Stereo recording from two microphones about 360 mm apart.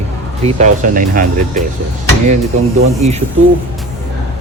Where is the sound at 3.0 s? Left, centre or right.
Centre.